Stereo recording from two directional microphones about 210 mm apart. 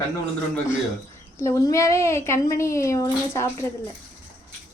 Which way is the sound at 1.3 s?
15° left (ahead or behind).